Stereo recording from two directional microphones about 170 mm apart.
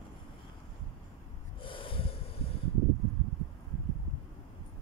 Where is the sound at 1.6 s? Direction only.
30° left (ahead or behind).